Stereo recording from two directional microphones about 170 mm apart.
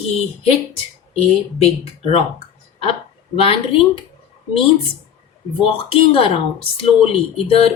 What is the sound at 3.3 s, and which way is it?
Speech, 35° left (ahead or behind).